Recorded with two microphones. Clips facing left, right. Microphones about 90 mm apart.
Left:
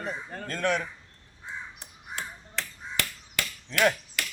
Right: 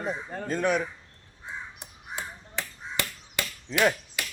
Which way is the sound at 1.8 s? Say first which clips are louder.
Right 1 dB; 15° right (ahead or behind).